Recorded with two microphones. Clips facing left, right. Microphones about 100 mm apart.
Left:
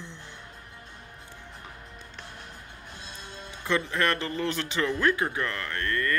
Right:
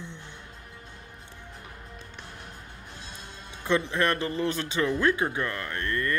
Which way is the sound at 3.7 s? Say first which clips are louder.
Right 1 dB; 20° right (ahead or behind).